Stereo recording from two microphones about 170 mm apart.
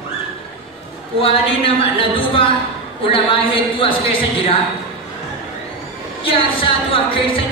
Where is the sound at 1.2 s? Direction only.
35° left (ahead or behind).